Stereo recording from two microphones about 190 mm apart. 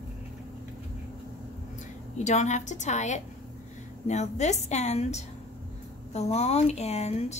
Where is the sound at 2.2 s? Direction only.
40° left (ahead or behind).